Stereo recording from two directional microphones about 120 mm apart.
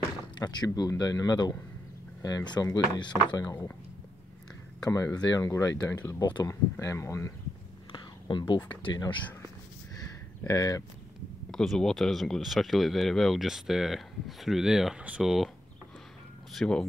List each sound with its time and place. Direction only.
0.4 s speech: 35° left (ahead or behind)
4.8 s speech: 30° left (ahead or behind)
6.8 s speech: 25° left (ahead or behind)
7.9 s speech: 40° left (ahead or behind)
10.4 s speech: 30° left (ahead or behind)
11.5 s speech: 5° left (ahead or behind)
16.5 s speech: 5° left (ahead or behind)